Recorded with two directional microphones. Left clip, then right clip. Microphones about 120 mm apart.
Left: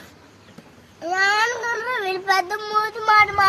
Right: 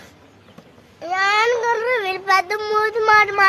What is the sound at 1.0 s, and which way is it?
Child singing, 35° right (ahead or behind).